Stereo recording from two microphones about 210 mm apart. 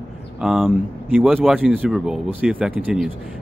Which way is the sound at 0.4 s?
Centre (ahead or behind).